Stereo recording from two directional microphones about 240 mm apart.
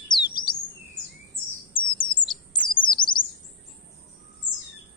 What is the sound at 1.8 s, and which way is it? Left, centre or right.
Chirp, left.